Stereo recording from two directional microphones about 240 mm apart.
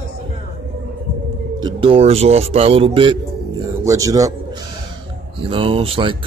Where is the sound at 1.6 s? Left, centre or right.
Right.